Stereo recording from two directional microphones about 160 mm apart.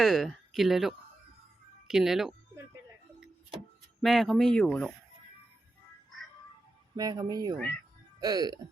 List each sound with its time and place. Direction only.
0.0 s speech: centre (ahead or behind)
4.0 s speech: centre (ahead or behind)
6.9 s speech: 25° right (ahead or behind)